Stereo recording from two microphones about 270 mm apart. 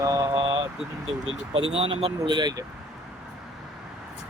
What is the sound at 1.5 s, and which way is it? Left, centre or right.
Speech, right.